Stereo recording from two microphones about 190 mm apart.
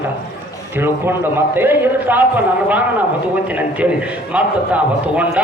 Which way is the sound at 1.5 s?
10° right (ahead or behind).